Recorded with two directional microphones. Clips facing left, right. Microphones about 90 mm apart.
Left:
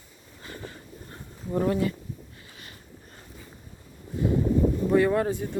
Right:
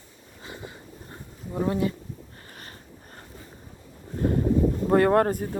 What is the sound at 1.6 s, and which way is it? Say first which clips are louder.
Speech: right 1 dB; 25° right (ahead or behind).